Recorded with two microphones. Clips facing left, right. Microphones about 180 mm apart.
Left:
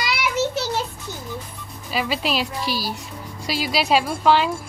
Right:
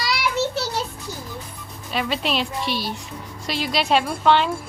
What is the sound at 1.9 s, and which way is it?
A woman's voice, centre (ahead or behind).